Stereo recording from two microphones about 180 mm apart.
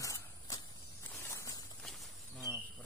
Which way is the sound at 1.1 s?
15° left (ahead or behind).